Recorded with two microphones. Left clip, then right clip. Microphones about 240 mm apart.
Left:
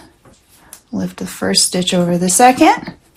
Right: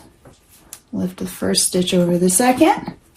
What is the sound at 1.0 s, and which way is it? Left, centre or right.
Speech, left.